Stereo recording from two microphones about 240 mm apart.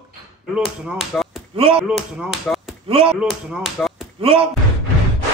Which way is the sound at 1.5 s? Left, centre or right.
Right.